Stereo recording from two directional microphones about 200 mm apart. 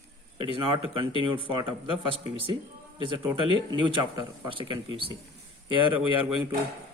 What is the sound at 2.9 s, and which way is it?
Speech, 25° right (ahead or behind).